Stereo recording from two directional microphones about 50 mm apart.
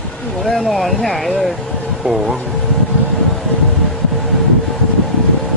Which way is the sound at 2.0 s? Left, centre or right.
Centre.